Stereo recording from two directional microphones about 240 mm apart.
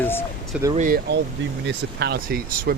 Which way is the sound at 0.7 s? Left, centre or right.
Right.